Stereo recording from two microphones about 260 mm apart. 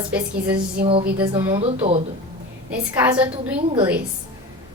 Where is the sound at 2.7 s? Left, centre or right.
Centre.